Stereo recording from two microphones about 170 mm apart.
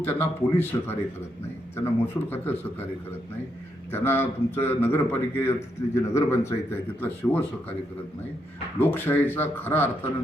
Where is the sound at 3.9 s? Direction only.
15° left (ahead or behind).